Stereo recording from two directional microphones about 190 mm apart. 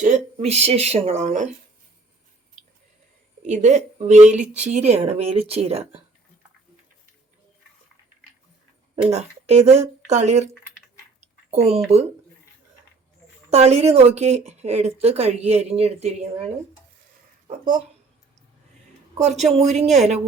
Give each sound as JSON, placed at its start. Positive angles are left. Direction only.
{"t": 0.0, "sound": "speech", "side_deg": -35}
{"t": 3.4, "sound": "speech", "side_deg": -40}
{"t": 9.0, "sound": "speech", "side_deg": -35}
{"t": 11.9, "sound": "speech", "side_deg": -35}
{"t": 13.5, "sound": "speech", "side_deg": -35}
{"t": 17.5, "sound": "speech", "side_deg": -45}
{"t": 19.1, "sound": "speech", "side_deg": -35}